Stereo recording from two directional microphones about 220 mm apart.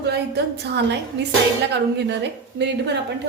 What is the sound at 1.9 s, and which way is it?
Speech, 50° right (ahead or behind).